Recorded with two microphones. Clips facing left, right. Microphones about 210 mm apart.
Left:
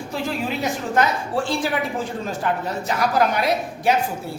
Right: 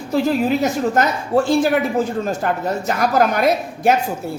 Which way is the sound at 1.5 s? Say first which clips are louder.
Right 7 dB; 45° right (ahead or behind).